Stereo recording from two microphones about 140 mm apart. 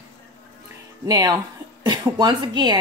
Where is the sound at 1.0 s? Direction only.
30° right (ahead or behind).